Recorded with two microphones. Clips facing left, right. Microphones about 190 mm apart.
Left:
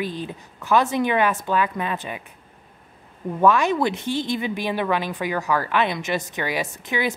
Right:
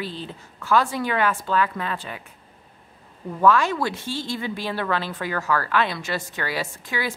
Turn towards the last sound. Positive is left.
turn(degrees=20)  # may be behind; listen again after turning